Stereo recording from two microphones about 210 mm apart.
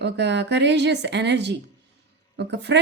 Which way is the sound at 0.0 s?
55° right (ahead or behind).